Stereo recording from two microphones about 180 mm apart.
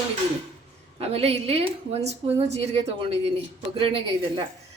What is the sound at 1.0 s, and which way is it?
Speech, 35° right (ahead or behind).